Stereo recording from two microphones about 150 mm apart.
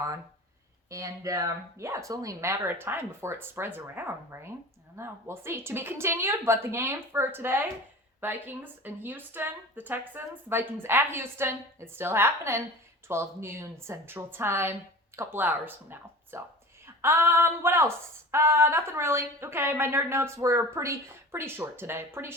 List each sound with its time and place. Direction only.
0.9 s speech: 20° right (ahead or behind)